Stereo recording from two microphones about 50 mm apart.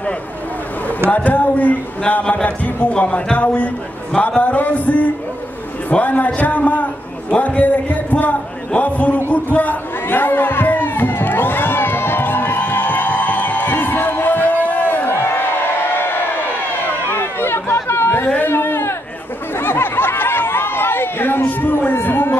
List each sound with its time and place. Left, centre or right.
1.1 s music: left
2.2 s speech: left
3.3 s music: left
7.2 s a man's voice: left
9.3 s music: left
15.0 s crowd: left
17.8 s chatter: left
18.2 s a sound: left
18.5 s a sound: left
19.6 s chatter: left
21.5 s music: left
22.0 s a sound: left